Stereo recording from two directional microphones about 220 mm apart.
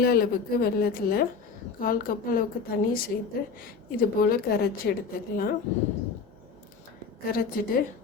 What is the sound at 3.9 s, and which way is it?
A woman's voice, 40° left (ahead or behind).